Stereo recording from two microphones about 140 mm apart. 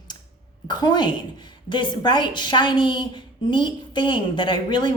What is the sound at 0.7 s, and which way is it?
A woman's voice, 30° left (ahead or behind).